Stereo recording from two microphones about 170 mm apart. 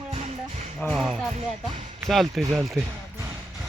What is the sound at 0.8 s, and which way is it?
Speech, centre (ahead or behind).